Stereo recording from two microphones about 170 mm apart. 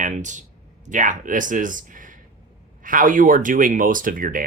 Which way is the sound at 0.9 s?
50° right (ahead or behind).